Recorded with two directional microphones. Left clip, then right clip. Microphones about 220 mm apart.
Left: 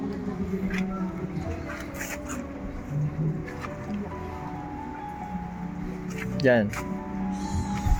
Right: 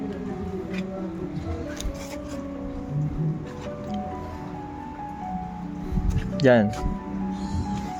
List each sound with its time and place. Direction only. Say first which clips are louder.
6.3 s speech: right 3 dB; 25° right (ahead or behind)